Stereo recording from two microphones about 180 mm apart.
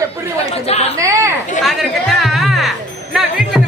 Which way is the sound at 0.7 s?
35° left (ahead or behind).